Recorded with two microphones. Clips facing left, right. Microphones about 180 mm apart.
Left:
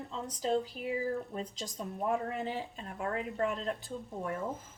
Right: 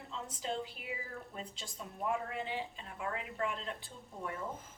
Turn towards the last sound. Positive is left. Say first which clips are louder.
# left 6 dB
turn(degrees=40)  # may be behind; listen again after turning